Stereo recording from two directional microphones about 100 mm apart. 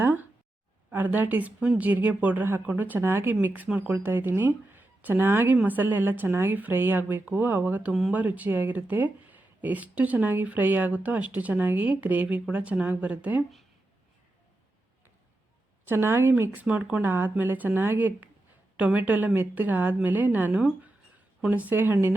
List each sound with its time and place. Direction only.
0.0 s a sound: 20° right (ahead or behind)
0.9 s speech: 20° right (ahead or behind)
15.9 s speech: 20° right (ahead or behind)